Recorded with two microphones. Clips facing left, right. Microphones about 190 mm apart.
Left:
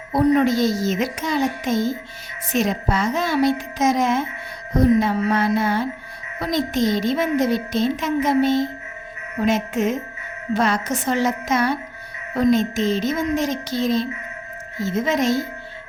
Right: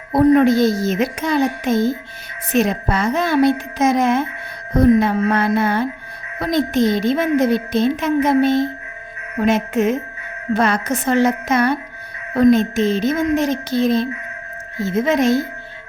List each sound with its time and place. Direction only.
0.1 s a woman's voice: 50° right (ahead or behind)